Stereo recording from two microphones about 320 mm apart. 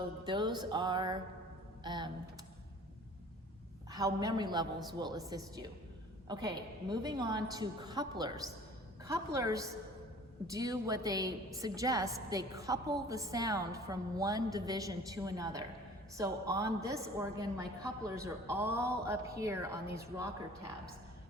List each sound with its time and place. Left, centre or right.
0.3 s a woman's voice: centre
3.9 s a woman's voice: centre